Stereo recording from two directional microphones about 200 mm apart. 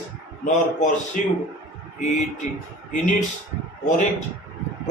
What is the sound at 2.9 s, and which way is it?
Speech, 40° left (ahead or behind).